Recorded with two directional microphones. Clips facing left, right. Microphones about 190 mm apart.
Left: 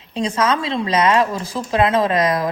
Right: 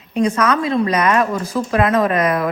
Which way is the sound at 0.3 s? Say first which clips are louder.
Right 3 dB; 25° left (ahead or behind).